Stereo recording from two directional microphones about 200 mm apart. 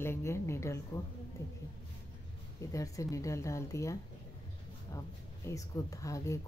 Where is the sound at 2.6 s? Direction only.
15° left (ahead or behind).